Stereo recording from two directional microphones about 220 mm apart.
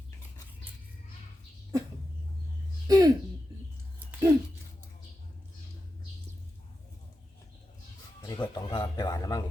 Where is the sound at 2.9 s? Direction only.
15° right (ahead or behind).